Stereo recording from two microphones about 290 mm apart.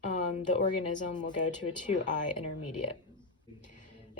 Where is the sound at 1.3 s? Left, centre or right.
Left.